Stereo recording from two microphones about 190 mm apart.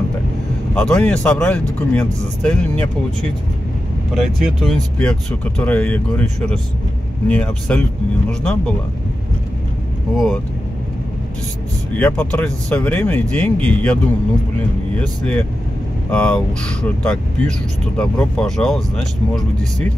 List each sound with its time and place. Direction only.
0.7 s speech: 5° left (ahead or behind)
4.1 s speech: centre (ahead or behind)
10.1 s speech: centre (ahead or behind)
12.0 s speech: 5° left (ahead or behind)
16.1 s speech: 5° left (ahead or behind)